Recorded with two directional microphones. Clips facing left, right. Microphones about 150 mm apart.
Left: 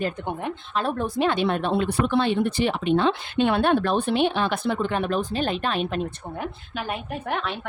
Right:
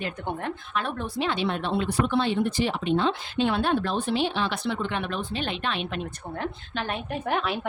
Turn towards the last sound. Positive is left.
turn(degrees=-5)  # may be behind; listen again after turning